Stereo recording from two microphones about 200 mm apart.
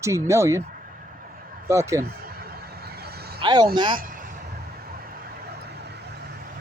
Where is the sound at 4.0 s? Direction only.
45° right (ahead or behind).